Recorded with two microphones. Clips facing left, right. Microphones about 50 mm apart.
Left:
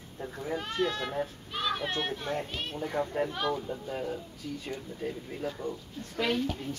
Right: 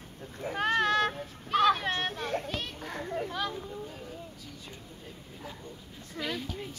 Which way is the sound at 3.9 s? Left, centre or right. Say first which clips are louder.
Left 8 dB; left.